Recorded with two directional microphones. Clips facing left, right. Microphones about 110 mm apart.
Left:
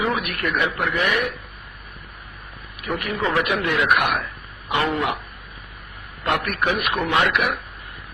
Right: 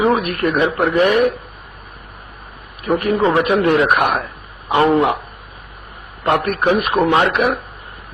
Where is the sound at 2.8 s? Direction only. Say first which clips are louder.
Right 9 dB; 35° right (ahead or behind).